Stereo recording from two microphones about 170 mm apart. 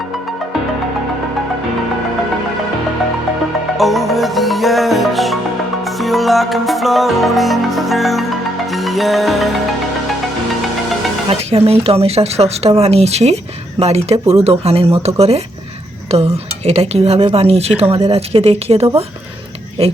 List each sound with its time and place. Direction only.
3.8 s music: centre (ahead or behind)
11.3 s speech: 35° right (ahead or behind)